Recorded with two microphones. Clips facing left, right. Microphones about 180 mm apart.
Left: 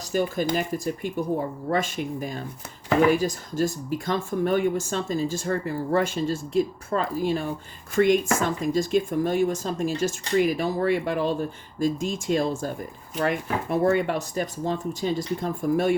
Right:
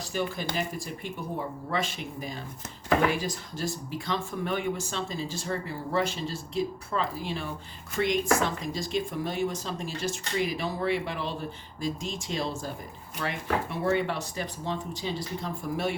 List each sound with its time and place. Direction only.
0.0 s speech: 45° left (ahead or behind)
1.7 s speech: 50° left (ahead or behind)